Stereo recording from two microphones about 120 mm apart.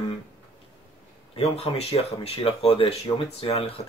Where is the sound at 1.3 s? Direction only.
55° left (ahead or behind).